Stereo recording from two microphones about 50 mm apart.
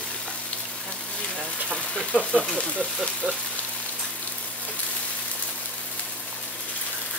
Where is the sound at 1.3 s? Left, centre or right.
Centre.